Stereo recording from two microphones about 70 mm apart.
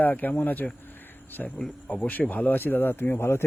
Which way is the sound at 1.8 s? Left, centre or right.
Centre.